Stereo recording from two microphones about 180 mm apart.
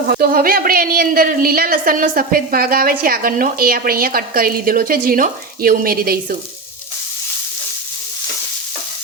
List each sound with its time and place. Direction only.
0.1 s a woman's voice: 55° right (ahead or behind)